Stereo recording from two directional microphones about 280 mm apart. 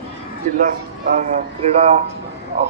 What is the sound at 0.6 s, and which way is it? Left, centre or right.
A man's voice, right.